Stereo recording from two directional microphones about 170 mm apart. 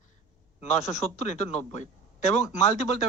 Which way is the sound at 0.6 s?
40° left (ahead or behind).